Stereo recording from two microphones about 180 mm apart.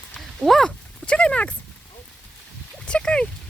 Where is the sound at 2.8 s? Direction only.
5° left (ahead or behind).